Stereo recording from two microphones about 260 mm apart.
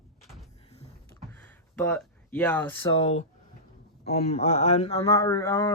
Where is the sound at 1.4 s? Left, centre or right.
Centre.